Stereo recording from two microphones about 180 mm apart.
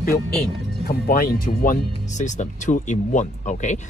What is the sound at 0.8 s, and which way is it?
Speech, 55° left (ahead or behind).